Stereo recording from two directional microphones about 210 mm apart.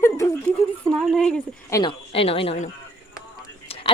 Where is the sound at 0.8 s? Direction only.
5° left (ahead or behind).